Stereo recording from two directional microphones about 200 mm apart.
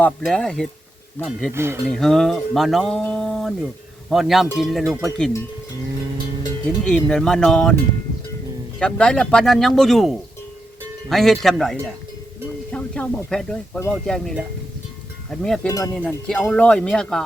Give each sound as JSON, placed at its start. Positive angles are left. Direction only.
{"t": 0.0, "sound": "speech", "side_deg": 5}
{"t": 1.5, "sound": "speech", "side_deg": -10}
{"t": 1.9, "sound": "speech", "side_deg": 0}
{"t": 6.8, "sound": "speech", "side_deg": 5}
{"t": 8.8, "sound": "speech", "side_deg": 5}
{"t": 15.6, "sound": "cowbell", "side_deg": 15}
{"t": 16.0, "sound": "speech", "side_deg": 5}